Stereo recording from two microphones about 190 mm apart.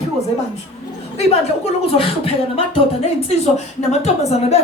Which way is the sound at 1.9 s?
30° left (ahead or behind).